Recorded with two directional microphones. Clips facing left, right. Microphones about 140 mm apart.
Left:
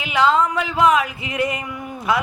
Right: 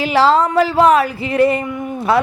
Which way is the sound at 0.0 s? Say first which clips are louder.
Right 5 dB; 35° right (ahead or behind).